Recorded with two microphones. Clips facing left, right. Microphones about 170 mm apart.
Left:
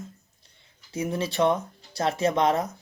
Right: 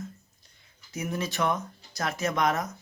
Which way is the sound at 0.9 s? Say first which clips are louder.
Left 4 dB; 30° left (ahead or behind).